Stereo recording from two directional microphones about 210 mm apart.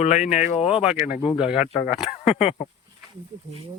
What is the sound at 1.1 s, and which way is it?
Speech, 35° left (ahead or behind).